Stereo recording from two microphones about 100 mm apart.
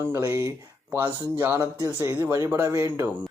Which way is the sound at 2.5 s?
25° right (ahead or behind).